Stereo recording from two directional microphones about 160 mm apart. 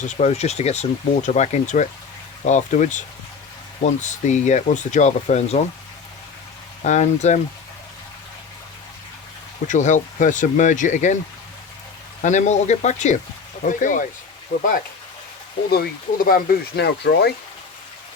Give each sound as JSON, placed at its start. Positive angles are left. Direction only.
{"t": 0.0, "sound": "speech", "side_deg": 45}
{"t": 6.8, "sound": "speech", "side_deg": 45}
{"t": 9.6, "sound": "speech", "side_deg": 50}
{"t": 12.2, "sound": "speech", "side_deg": 50}
{"t": 15.7, "sound": "speech", "side_deg": 70}